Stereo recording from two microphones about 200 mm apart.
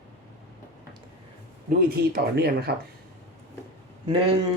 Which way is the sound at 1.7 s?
50° right (ahead or behind).